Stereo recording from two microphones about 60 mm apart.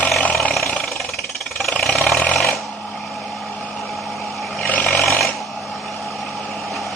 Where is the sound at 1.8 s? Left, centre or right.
Centre.